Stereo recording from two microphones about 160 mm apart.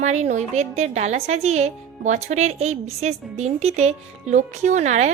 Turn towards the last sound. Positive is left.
turn(degrees=-45)  # may be behind; listen again after turning